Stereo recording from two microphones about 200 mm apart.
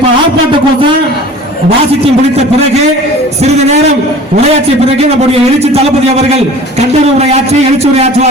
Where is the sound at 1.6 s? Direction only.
30° right (ahead or behind).